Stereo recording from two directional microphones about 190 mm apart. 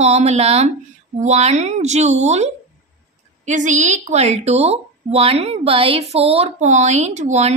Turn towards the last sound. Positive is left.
turn(degrees=-35)  # may be behind; listen again after turning